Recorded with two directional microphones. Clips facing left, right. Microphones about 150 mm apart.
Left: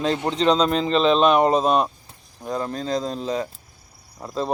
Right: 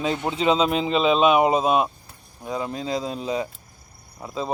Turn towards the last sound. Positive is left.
turn(degrees=0)  # may be behind; listen again after turning